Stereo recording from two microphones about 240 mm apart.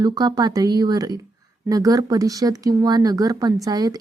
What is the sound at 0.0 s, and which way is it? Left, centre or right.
A woman's voice, centre.